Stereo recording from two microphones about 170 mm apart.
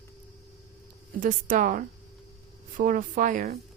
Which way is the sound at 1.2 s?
50° right (ahead or behind).